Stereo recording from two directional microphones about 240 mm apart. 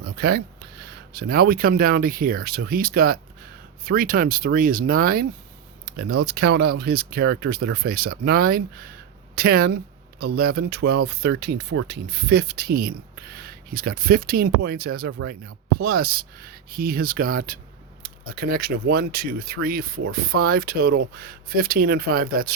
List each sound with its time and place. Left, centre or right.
0.0 s speech: right